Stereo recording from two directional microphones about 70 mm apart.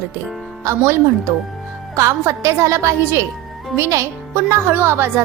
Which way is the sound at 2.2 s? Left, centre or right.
Right.